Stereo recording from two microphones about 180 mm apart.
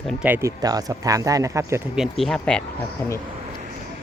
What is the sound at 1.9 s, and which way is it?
Speech, centre (ahead or behind).